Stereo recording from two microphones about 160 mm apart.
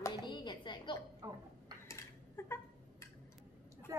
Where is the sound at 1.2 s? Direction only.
25° right (ahead or behind).